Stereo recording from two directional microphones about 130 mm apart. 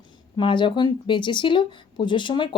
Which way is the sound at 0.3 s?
35° left (ahead or behind).